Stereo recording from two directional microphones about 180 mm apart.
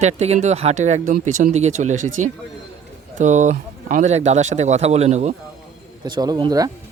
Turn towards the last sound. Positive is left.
turn(degrees=-20)  # may be behind; listen again after turning